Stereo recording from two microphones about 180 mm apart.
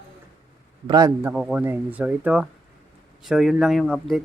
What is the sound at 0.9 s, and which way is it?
Speech, 20° right (ahead or behind).